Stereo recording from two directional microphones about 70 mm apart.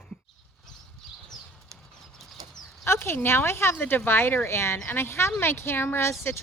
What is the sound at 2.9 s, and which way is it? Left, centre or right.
Speech, left.